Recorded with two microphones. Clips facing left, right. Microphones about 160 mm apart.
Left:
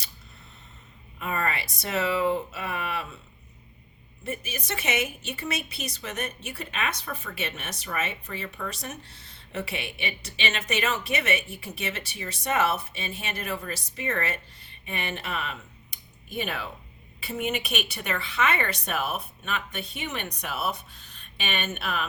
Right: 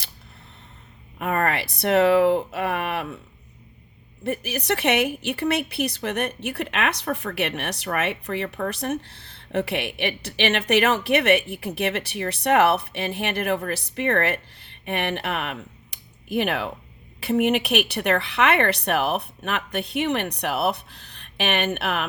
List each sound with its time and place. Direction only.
1.2 s speech: 60° right (ahead or behind)
4.2 s a woman's voice: 65° right (ahead or behind)